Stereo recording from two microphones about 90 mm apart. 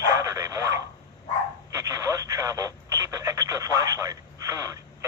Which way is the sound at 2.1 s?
35° right (ahead or behind).